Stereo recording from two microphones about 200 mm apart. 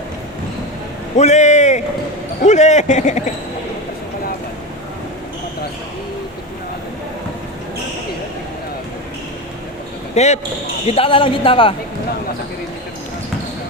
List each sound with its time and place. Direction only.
1.1 s speech: 35° left (ahead or behind)
10.2 s speech: 35° left (ahead or behind)